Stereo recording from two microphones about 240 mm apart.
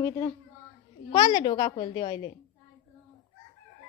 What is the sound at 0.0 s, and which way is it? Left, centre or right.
A woman's voice, centre.